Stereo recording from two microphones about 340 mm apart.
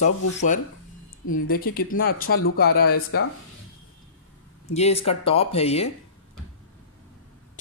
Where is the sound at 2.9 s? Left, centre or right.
Left.